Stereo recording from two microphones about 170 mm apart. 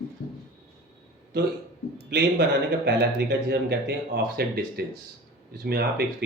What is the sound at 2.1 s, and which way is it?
Speech, 90° right.